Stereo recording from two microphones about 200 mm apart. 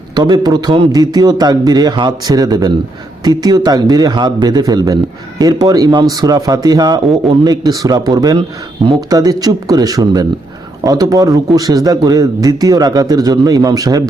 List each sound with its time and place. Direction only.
0.1 s a man's voice: 20° right (ahead or behind)